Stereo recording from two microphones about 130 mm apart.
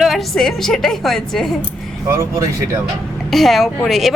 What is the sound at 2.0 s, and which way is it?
Speech, 25° right (ahead or behind).